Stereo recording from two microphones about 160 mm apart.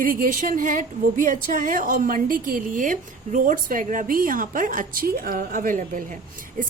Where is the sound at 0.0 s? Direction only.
60° right (ahead or behind).